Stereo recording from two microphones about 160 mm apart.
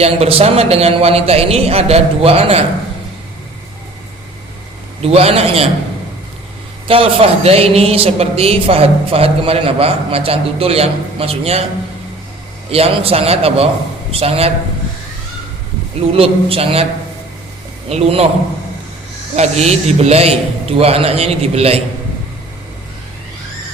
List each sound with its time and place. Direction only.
0.0 s speech: 40° right (ahead or behind)
5.0 s speech: 40° right (ahead or behind)
6.8 s speech: 35° right (ahead or behind)
12.7 s speech: 35° right (ahead or behind)
16.0 s speech: 35° right (ahead or behind)
17.8 s speech: 40° right (ahead or behind)
19.4 s speech: 40° right (ahead or behind)